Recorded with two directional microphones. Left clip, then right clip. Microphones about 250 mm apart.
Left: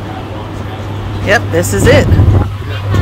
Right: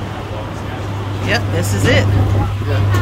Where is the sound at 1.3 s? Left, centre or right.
Centre.